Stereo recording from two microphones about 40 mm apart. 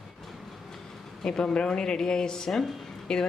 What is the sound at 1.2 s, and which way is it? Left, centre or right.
A woman's voice, centre.